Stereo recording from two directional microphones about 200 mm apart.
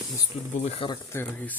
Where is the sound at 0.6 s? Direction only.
30° left (ahead or behind).